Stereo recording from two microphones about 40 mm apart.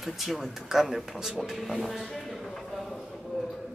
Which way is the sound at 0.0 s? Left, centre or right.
Centre.